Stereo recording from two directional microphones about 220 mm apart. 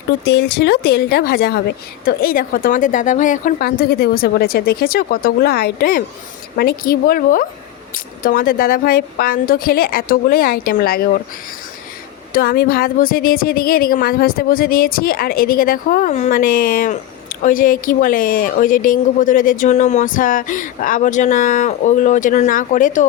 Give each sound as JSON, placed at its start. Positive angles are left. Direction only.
{"t": 0.3, "sound": "a woman's voice", "side_deg": 50}
{"t": 12.3, "sound": "a woman's voice", "side_deg": 45}